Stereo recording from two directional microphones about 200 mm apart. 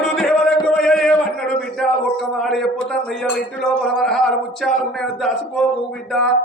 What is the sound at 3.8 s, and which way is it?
Speech, centre (ahead or behind).